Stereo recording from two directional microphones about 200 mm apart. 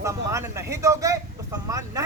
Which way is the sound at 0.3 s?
15° right (ahead or behind).